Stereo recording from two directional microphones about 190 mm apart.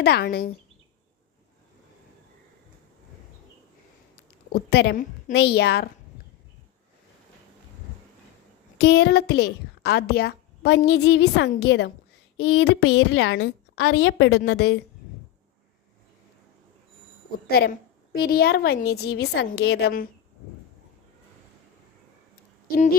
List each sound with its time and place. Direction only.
0.0 s a woman's voice: 55° left (ahead or behind)
4.5 s a woman's voice: 60° left (ahead or behind)
8.8 s a woman's voice: 60° left (ahead or behind)
12.4 s a woman's voice: 90° left; by 14.8 s 60° left (ahead or behind)
17.5 s a woman's voice: 55° left (ahead or behind)